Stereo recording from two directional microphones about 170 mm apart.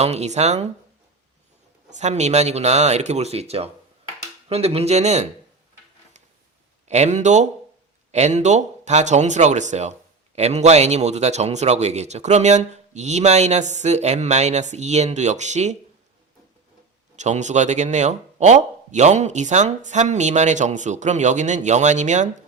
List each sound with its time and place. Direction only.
0.0 s a man's voice: 40° right (ahead or behind)
1.9 s a man's voice: 40° right (ahead or behind)
6.8 s a man's voice: 40° right (ahead or behind)
17.2 s speech: 45° right (ahead or behind)